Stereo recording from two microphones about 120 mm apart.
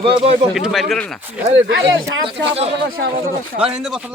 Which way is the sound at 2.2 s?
55° right (ahead or behind).